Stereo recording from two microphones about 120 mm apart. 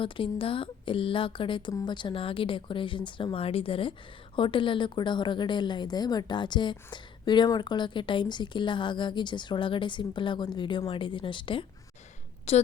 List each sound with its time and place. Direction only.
0.0 s a woman's voice: 45° left (ahead or behind)
12.5 s a woman's voice: 60° left (ahead or behind)